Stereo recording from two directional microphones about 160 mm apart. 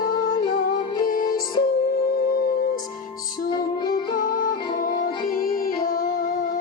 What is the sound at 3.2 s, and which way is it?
Music, 60° left (ahead or behind).